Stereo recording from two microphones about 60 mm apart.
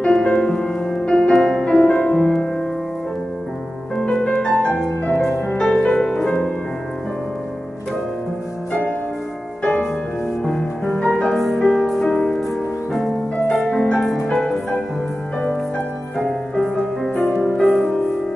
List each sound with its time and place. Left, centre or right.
0.0 s music: centre
3.9 s music: centre
9.6 s music: centre
11.0 s music: centre
13.6 s music: centre
13.9 s music: centre
14.2 s music: centre
17.3 s music: centre